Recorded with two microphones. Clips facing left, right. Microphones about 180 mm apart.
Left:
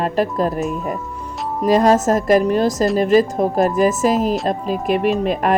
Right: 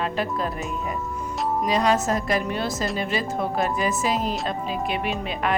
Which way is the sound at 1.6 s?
45° left (ahead or behind).